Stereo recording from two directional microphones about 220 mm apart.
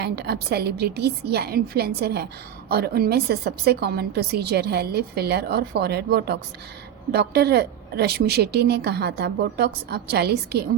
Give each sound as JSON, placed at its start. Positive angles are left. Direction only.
{"t": 0.0, "sound": "a woman's voice", "side_deg": -45}